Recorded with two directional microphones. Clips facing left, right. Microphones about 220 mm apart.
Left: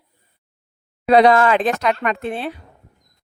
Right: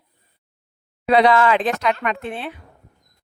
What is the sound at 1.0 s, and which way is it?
Speech, 45° left (ahead or behind).